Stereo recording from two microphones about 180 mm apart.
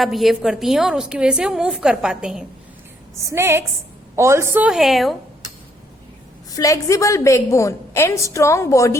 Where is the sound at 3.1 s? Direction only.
15° right (ahead or behind).